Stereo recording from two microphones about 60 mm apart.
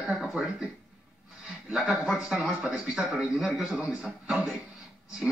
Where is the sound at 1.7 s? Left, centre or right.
Centre.